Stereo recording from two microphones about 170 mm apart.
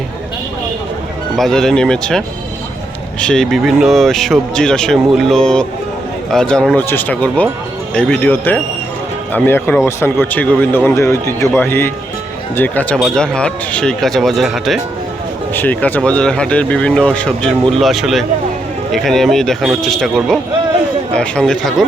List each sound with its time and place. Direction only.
1.4 s speech: 5° left (ahead or behind)
15.5 s speech: 10° left (ahead or behind)